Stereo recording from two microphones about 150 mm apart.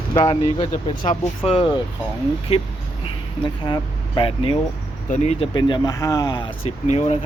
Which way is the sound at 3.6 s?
30° left (ahead or behind).